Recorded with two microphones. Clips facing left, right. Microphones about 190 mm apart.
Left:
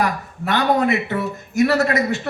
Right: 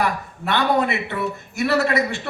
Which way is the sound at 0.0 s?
40° left (ahead or behind).